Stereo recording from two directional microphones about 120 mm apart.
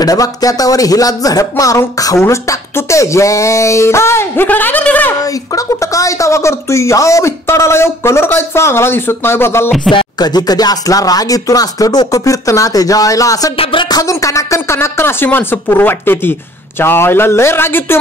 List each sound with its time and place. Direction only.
0.0 s speech: 30° left (ahead or behind); by 5.1 s 15° left (ahead or behind)
5.2 s speech: 30° left (ahead or behind)
9.8 s speech: 40° left (ahead or behind)
13.6 s a sound: 45° left (ahead or behind)
13.8 s speech: 30° left (ahead or behind)